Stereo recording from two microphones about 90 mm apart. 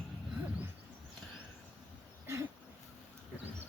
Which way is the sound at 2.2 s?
30° right (ahead or behind).